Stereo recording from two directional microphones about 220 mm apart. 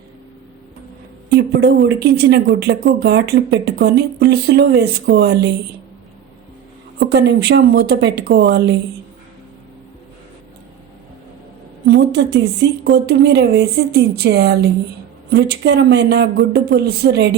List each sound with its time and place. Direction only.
1.3 s speech: 45° right (ahead or behind)
7.0 s speech: 50° right (ahead or behind)
11.9 s speech: 50° right (ahead or behind)